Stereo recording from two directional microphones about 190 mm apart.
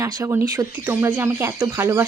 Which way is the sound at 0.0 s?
15° right (ahead or behind).